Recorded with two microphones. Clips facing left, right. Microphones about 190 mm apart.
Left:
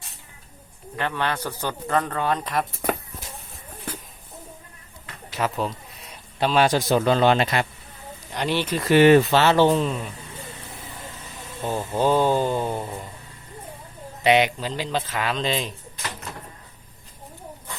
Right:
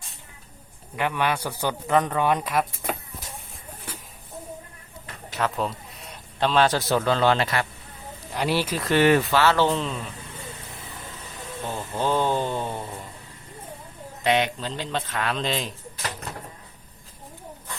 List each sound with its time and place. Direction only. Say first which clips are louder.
0.9 s speech: right 1 dB; 10° right (ahead or behind)
5.4 s a man's voice: left 1 dB; centre (ahead or behind); by 7.7 s 20° left (ahead or behind)
8.3 s speech: even; 5° right (ahead or behind)
9.0 s speech: left 4 dB; 25° left (ahead or behind); by 10.1 s 10° left (ahead or behind)
11.9 s speech: left 4 dB; 10° left (ahead or behind)
14.3 s speech: left 4 dB; 10° left (ahead or behind)